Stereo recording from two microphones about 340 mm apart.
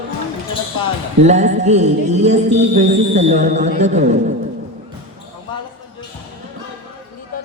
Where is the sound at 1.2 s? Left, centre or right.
Centre.